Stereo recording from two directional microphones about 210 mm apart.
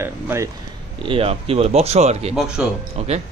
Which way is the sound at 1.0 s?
25° right (ahead or behind).